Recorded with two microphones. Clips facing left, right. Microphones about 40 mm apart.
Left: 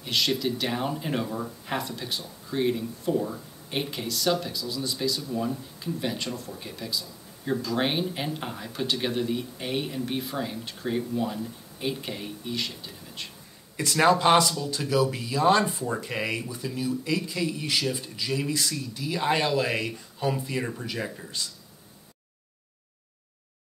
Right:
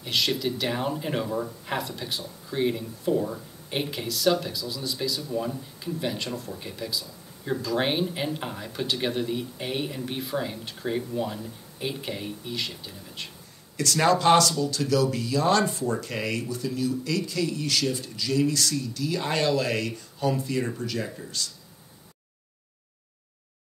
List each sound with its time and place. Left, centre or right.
0.0 s speech: centre
13.7 s speech: centre